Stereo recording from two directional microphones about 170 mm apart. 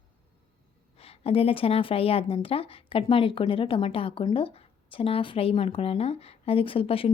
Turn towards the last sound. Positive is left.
turn(degrees=35)  # may be behind; listen again after turning